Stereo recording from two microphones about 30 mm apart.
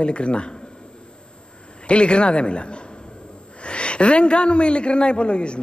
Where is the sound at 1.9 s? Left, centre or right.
Left.